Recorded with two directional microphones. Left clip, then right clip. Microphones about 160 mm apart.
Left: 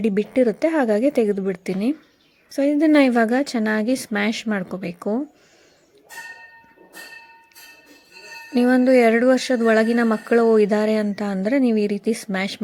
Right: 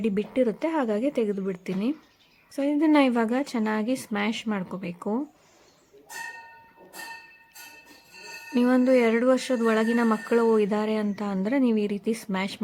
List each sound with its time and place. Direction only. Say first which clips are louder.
0.0 s speech: left 6 dB; 20° left (ahead or behind)
8.5 s speech: left 5 dB; 20° left (ahead or behind)